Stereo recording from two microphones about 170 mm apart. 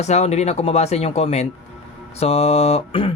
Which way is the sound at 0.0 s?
40° left (ahead or behind).